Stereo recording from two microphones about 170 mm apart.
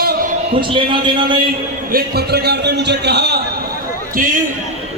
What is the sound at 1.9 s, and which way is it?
A man's voice, 70° right (ahead or behind).